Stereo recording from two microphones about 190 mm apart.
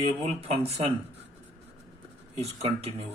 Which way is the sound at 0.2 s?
35° right (ahead or behind).